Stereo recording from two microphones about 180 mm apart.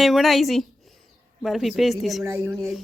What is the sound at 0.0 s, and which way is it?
Speech, centre (ahead or behind).